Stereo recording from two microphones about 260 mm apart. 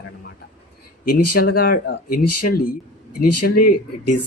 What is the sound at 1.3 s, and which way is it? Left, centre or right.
Speech, left.